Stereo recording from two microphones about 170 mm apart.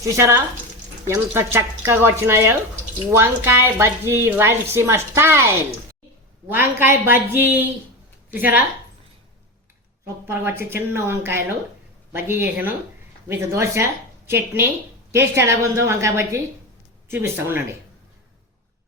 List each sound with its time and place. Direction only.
0.0 s a woman's voice: 15° right (ahead or behind)
6.5 s a woman's voice: 10° right (ahead or behind)
10.2 s a woman's voice: 15° right (ahead or behind)